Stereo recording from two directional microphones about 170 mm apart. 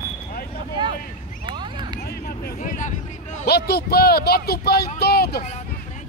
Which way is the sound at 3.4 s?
70° left (ahead or behind).